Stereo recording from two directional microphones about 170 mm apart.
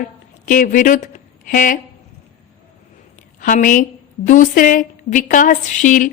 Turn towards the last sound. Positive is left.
turn(degrees=50)  # may be behind; listen again after turning